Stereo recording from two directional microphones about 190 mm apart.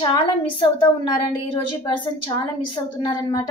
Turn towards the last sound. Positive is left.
turn(degrees=20)  # may be behind; listen again after turning